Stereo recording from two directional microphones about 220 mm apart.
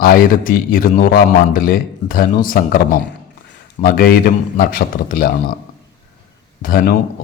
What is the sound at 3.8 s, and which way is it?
A man's voice, 40° left (ahead or behind).